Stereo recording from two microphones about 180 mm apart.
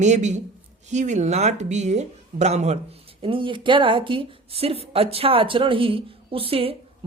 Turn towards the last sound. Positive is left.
turn(degrees=-30)  # may be behind; listen again after turning